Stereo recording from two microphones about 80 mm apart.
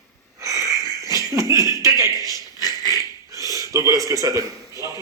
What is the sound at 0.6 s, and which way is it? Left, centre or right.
Wheeze, left.